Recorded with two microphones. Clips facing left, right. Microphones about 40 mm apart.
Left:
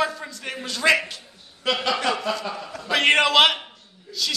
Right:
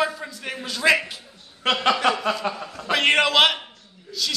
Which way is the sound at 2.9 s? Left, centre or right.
Centre.